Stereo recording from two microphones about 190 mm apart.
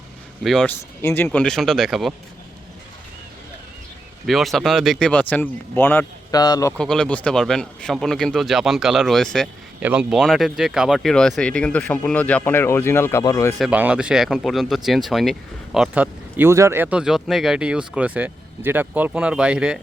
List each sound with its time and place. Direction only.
0.4 s speech: centre (ahead or behind)
1.0 s speech: 10° left (ahead or behind)
4.3 s speech: centre (ahead or behind); by 6.7 s 20° left (ahead or behind)
6.7 s speech: 5° left (ahead or behind)
13.6 s speech: 5° right (ahead or behind)